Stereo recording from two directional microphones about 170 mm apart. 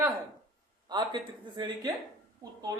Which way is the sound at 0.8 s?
25° right (ahead or behind).